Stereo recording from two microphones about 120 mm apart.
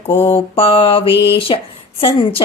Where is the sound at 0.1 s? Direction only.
50° left (ahead or behind).